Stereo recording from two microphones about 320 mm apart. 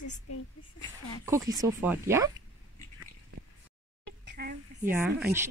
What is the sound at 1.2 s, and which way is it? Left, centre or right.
Speech, centre.